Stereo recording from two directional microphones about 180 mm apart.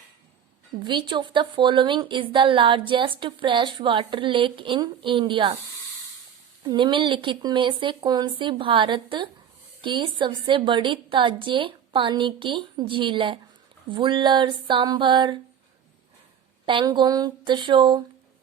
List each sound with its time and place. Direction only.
0.9 s a woman's voice: 25° right (ahead or behind)
6.6 s a woman's voice: 25° right (ahead or behind)
16.6 s a woman's voice: 25° right (ahead or behind)